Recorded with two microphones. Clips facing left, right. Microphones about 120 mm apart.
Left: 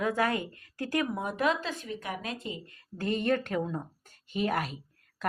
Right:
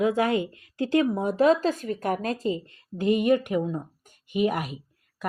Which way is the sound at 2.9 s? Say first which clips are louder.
Right 7 dB; 15° right (ahead or behind).